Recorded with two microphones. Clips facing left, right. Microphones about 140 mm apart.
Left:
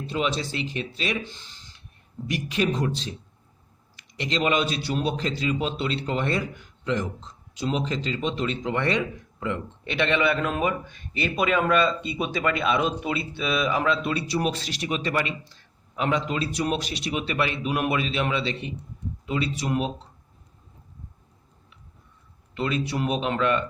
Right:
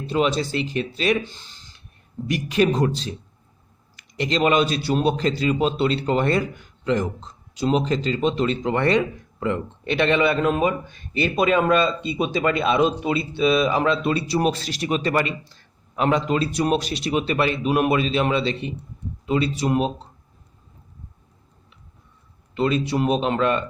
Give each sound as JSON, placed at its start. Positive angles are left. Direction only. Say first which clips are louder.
{"t": 0.1, "sound": "speech", "louder": "right 6 dB", "side_deg": -45}
{"t": 2.3, "sound": "a man's voice", "louder": "right 5 dB", "side_deg": -50}
{"t": 22.5, "sound": "speech", "louder": "right 5 dB", "side_deg": -30}